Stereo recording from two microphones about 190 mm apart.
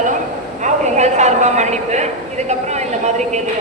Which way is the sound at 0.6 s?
40° right (ahead or behind).